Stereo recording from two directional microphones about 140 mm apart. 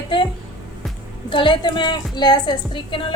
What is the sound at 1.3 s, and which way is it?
A woman's voice, 35° left (ahead or behind).